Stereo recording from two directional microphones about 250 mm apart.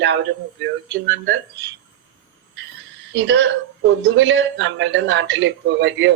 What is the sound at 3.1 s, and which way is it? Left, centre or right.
A man's voice, right.